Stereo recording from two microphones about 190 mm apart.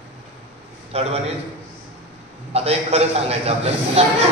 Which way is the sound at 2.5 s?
35° right (ahead or behind).